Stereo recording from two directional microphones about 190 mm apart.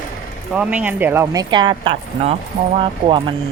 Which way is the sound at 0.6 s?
5° right (ahead or behind).